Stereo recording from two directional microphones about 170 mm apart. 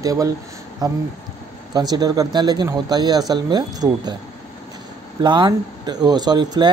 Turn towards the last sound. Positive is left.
turn(degrees=-25)  # may be behind; listen again after turning